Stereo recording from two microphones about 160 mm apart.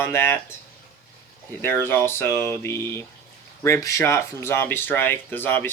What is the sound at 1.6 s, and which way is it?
Speech, 15° left (ahead or behind).